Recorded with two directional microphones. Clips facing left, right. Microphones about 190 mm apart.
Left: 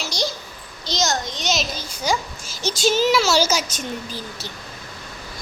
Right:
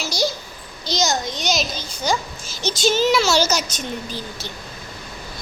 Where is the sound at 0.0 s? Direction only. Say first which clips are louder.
Right 3 dB; 5° right (ahead or behind).